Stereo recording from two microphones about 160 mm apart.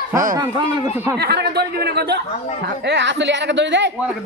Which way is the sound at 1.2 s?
90° right.